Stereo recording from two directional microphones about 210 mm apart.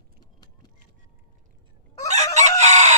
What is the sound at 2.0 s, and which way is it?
Chicken, 35° right (ahead or behind).